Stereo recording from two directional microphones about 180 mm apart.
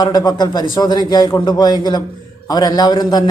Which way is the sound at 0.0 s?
20° left (ahead or behind).